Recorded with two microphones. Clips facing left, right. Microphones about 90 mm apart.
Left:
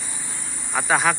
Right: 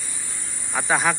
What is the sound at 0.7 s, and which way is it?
Speech, 5° left (ahead or behind).